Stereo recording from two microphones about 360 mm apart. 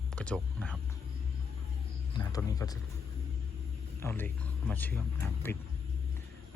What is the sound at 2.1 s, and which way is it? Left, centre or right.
Speech, centre.